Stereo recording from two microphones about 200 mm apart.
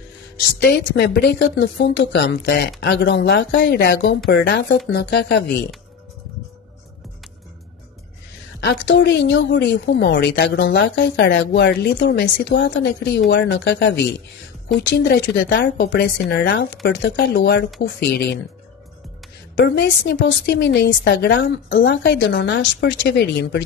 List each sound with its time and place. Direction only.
0.6 s a woman's voice: 55° left (ahead or behind)
8.6 s a woman's voice: 60° left (ahead or behind)
19.5 s a woman's voice: 55° left (ahead or behind)